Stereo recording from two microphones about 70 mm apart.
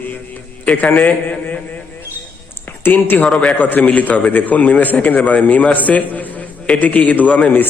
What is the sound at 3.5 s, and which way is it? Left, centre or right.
A man's voice, left.